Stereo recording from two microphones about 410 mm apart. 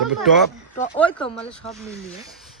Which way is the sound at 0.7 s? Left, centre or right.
Centre.